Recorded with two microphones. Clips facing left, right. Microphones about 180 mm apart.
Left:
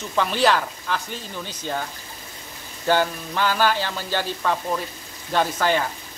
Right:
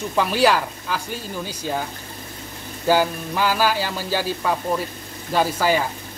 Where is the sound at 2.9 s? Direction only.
10° right (ahead or behind).